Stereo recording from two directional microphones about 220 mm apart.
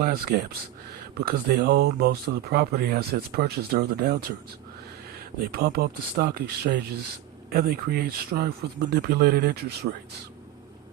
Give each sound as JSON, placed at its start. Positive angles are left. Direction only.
{"t": 0.0, "sound": "speech", "side_deg": -45}
{"t": 5.5, "sound": "speech", "side_deg": -45}